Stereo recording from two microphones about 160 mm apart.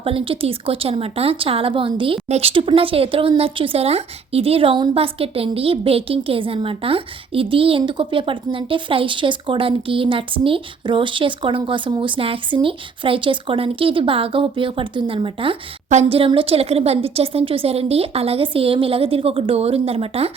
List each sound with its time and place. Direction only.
0.0 s speech: 35° right (ahead or behind)